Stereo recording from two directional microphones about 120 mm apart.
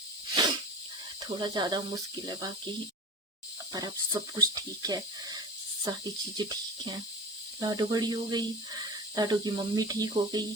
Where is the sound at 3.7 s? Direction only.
35° right (ahead or behind).